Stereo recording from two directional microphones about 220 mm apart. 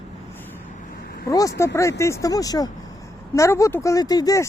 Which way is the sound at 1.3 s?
15° left (ahead or behind).